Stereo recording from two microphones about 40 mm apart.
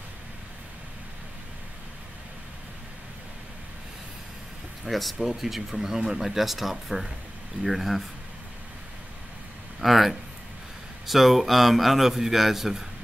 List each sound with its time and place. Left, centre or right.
4.8 s a man's voice: centre
9.8 s a man's voice: centre